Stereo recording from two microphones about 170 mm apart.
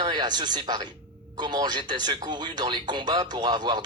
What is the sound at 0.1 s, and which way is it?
Speech, 25° right (ahead or behind).